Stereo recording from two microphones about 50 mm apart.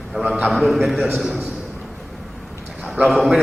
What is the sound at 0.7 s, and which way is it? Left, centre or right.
Speech, centre.